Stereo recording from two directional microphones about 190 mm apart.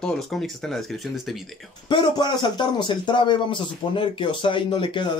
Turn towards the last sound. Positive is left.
turn(degrees=25)  # may be behind; listen again after turning